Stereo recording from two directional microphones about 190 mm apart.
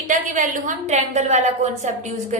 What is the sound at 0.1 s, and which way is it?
A woman's voice, 45° right (ahead or behind).